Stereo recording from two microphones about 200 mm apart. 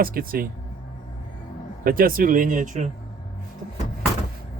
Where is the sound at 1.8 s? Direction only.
45° right (ahead or behind).